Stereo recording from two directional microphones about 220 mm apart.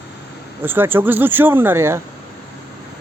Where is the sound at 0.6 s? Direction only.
10° right (ahead or behind).